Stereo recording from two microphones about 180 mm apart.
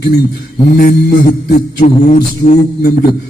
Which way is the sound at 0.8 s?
50° left (ahead or behind).